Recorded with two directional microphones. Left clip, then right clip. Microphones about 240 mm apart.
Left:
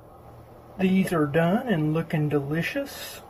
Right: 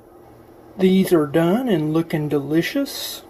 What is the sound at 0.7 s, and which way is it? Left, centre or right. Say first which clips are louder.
Speech: right 8 dB; right.